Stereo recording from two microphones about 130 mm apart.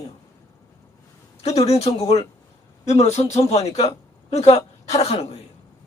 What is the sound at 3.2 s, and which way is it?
A man's voice, 55° left (ahead or behind).